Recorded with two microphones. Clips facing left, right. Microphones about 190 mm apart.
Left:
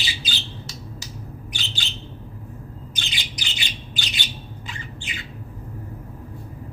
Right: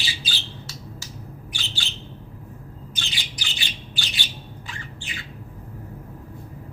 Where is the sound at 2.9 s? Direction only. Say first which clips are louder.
Left 1 dB; 20° left (ahead or behind).